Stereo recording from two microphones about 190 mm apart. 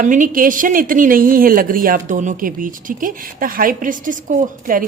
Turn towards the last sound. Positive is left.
turn(degrees=-45)  # may be behind; listen again after turning